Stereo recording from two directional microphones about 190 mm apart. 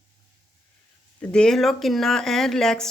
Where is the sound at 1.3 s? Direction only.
5° left (ahead or behind).